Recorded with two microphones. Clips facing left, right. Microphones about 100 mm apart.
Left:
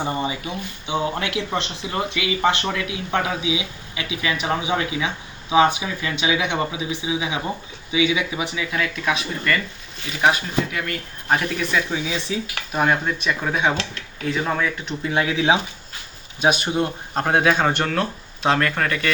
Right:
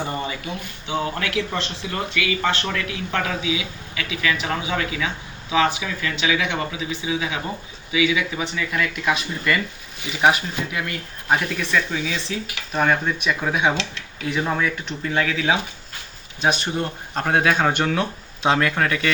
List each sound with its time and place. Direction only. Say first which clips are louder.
0.0 s speech: left 2 dB; 20° left (ahead or behind)
8.4 s speech: even; 5° left (ahead or behind)
10.7 s speech: even; 15° right (ahead or behind)
11.3 s speech: even; centre (ahead or behind)
11.9 s speech: left 1 dB; 15° left (ahead or behind)
13.2 s speech: right 1 dB; 5° right (ahead or behind)
15.0 s speech: left 2 dB; 15° left (ahead or behind)
16.4 s speech: left 2 dB; 10° left (ahead or behind); by 19.1 s 5° right (ahead or behind)